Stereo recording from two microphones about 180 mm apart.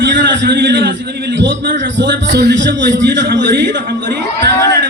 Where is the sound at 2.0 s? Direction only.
75° right (ahead or behind).